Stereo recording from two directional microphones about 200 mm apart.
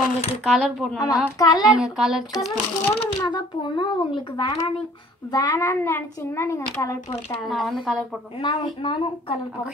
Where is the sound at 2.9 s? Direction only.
20° left (ahead or behind).